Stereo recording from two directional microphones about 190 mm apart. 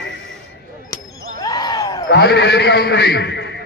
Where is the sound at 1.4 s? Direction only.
20° left (ahead or behind).